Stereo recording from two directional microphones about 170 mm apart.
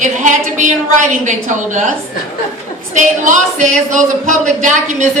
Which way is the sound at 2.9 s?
45° right (ahead or behind).